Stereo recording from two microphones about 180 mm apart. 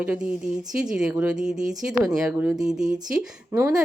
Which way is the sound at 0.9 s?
5° right (ahead or behind).